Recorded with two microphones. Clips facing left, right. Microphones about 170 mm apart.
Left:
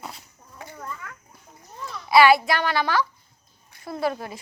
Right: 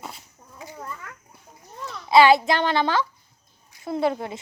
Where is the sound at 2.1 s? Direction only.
20° right (ahead or behind).